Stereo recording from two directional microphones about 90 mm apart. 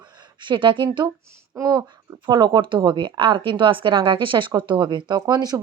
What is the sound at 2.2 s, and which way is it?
A woman's voice, 60° right (ahead or behind).